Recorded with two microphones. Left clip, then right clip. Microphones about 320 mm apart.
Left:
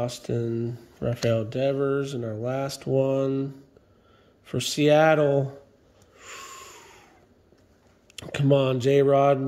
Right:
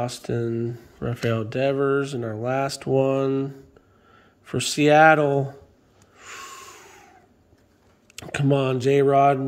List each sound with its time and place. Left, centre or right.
0.0 s speech: centre
6.1 s snort: centre
8.2 s speech: centre